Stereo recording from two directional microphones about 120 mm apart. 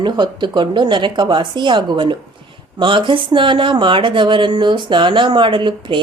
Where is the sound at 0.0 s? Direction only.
40° right (ahead or behind).